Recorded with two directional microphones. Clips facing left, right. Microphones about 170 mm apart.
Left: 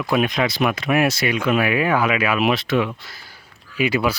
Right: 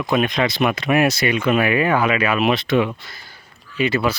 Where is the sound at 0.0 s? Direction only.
5° left (ahead or behind).